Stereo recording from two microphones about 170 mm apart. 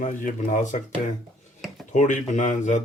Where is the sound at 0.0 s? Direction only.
50° left (ahead or behind).